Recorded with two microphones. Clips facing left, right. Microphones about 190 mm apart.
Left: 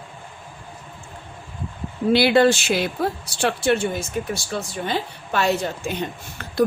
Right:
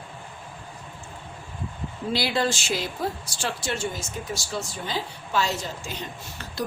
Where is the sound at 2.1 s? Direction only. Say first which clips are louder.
Left 10 dB; 65° left (ahead or behind).